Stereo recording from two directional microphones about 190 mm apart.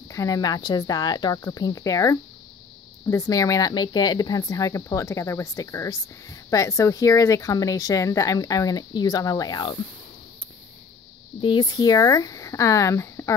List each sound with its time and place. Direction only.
0.1 s a woman's voice: 20° left (ahead or behind)
11.4 s speech: 25° left (ahead or behind)